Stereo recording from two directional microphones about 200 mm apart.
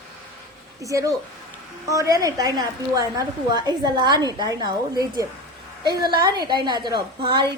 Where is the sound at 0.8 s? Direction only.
15° right (ahead or behind).